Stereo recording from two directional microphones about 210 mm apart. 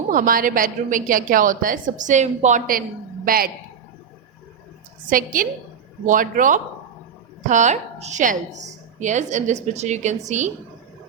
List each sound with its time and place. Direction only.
0.1 s a woman's voice: 40° right (ahead or behind)
5.0 s a woman's voice: 40° right (ahead or behind)